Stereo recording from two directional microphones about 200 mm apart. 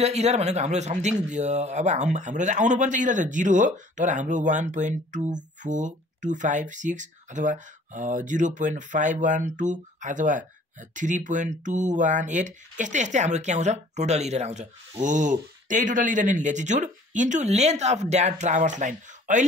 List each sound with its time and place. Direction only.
0.0 s speech: 35° right (ahead or behind)